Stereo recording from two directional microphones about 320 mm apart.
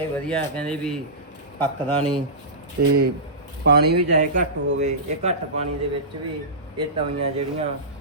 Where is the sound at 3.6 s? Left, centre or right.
Right.